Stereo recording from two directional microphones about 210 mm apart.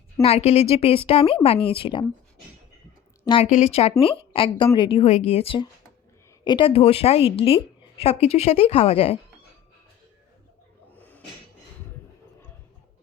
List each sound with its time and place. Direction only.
0.2 s a woman's voice: 30° left (ahead or behind)
3.2 s a woman's voice: 30° left (ahead or behind)